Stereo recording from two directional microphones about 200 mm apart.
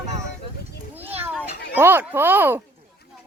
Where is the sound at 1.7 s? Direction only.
10° right (ahead or behind).